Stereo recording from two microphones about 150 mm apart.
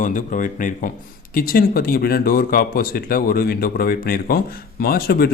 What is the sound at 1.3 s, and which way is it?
Speech, 80° left.